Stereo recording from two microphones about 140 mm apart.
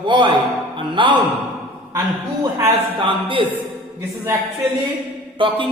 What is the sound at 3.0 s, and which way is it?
Speech, 35° right (ahead or behind).